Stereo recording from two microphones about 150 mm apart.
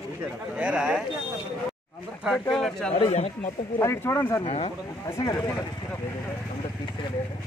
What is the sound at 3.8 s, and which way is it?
Speech, 15° left (ahead or behind).